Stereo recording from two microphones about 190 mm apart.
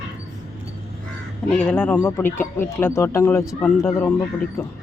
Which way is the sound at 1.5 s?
10° left (ahead or behind).